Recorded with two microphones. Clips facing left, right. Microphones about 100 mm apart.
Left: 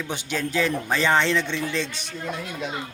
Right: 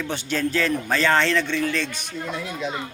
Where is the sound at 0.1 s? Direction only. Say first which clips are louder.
Right 3 dB; 15° left (ahead or behind).